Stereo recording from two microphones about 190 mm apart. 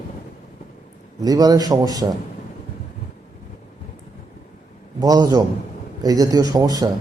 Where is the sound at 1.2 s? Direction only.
20° right (ahead or behind).